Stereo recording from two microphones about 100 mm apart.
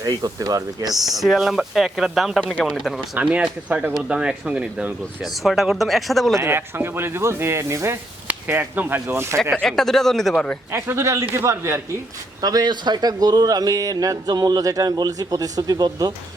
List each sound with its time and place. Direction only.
0.0 s speech: 40° right (ahead or behind)
0.9 s speech: centre (ahead or behind)
3.2 s speech: 15° right (ahead or behind)
5.2 s speech: centre (ahead or behind)
6.3 s speech: 25° right (ahead or behind)
9.4 s speech: 5° left (ahead or behind)
10.7 s speech: 25° right (ahead or behind)
12.4 s speech: 40° right (ahead or behind)